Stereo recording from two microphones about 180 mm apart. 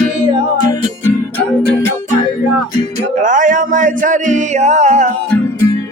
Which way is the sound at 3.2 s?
45° right (ahead or behind).